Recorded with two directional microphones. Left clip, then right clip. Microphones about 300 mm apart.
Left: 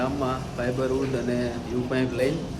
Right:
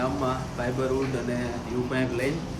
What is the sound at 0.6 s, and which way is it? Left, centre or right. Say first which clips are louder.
Speech: left 2 dB; centre.